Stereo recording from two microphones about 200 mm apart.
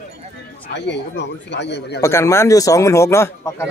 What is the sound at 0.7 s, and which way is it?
Speech, 60° left (ahead or behind).